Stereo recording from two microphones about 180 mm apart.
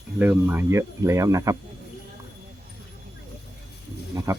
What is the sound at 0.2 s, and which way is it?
Speech, 10° right (ahead or behind).